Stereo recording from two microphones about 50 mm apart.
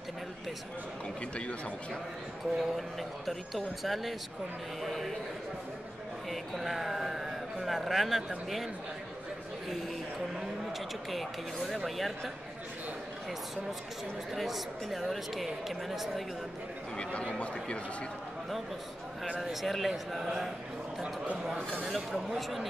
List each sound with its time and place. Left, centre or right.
2.5 s speech: centre
6.3 s speech: centre
11.1 s speech: centre
14.3 s speech: centre
16.9 s a man's voice: left
19.4 s a man's voice: centre
21.8 s speech: centre